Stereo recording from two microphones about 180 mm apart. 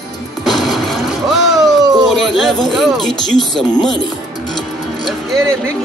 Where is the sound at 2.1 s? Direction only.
Centre (ahead or behind).